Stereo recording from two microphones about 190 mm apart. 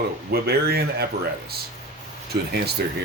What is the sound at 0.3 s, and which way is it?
Speech, 55° right (ahead or behind).